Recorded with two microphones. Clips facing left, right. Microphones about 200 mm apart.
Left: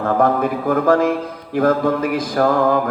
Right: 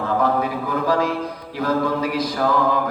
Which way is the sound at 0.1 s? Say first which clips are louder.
Left 4 dB; 50° left (ahead or behind).